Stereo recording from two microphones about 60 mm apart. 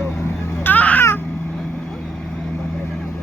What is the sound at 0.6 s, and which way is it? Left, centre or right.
Babbling, left.